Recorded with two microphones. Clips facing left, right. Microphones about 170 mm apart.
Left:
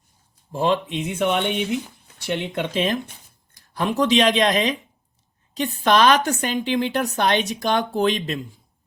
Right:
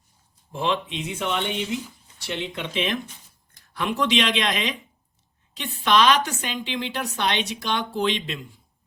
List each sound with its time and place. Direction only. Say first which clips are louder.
0.5 s a woman's voice: left 5 dB; 40° left (ahead or behind)